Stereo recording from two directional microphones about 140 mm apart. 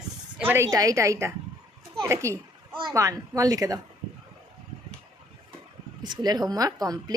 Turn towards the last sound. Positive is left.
turn(degrees=-25)  # may be behind; listen again after turning